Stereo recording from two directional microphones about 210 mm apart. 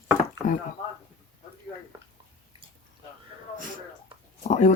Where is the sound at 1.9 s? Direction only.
15° right (ahead or behind).